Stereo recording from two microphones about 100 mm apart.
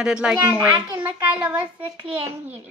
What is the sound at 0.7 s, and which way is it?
Speech, 45° right (ahead or behind).